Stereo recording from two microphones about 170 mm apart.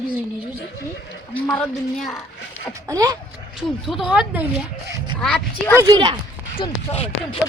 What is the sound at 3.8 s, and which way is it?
Speech, 5° right (ahead or behind).